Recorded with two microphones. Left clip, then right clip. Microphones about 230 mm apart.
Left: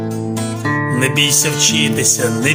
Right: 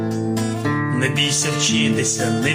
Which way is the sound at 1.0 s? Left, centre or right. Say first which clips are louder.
Left 6 dB; left.